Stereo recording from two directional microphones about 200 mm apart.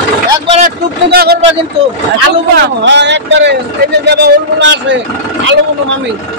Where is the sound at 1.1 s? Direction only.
50° right (ahead or behind).